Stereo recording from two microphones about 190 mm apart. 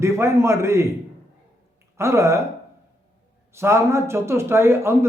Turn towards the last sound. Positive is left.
turn(degrees=-15)  # may be behind; listen again after turning